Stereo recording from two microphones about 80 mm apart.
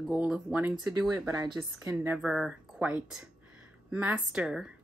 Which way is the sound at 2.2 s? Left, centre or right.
Centre.